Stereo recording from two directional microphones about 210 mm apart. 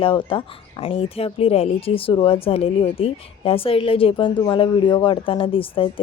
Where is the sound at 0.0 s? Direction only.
25° left (ahead or behind).